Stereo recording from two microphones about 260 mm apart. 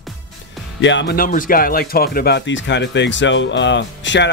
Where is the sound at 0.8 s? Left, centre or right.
Left.